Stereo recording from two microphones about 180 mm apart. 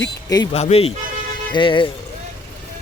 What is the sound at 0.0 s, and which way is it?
Speech, 20° left (ahead or behind).